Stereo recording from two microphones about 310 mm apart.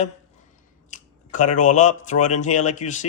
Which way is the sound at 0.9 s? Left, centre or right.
Left.